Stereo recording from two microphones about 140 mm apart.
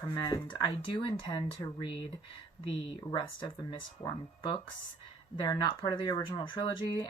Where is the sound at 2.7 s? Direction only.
35° left (ahead or behind).